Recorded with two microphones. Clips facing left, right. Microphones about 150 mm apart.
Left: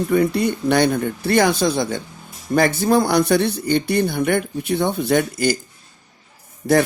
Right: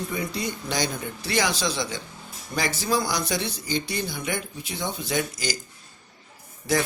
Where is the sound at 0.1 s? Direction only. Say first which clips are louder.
Left 12 dB; 60° left (ahead or behind).